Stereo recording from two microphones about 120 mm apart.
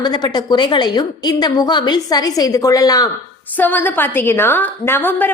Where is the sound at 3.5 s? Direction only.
15° left (ahead or behind).